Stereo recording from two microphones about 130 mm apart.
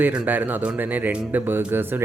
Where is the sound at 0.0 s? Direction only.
10° right (ahead or behind).